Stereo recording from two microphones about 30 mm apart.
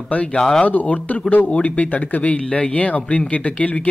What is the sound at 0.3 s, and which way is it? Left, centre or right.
Speech, left.